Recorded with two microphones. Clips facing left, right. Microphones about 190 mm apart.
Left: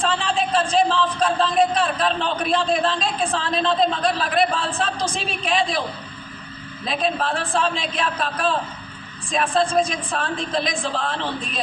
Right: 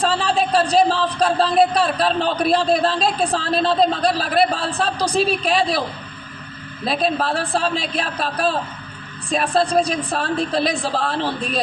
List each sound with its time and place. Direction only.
0.0 s a man's voice: 40° right (ahead or behind)
6.8 s a man's voice: 35° right (ahead or behind)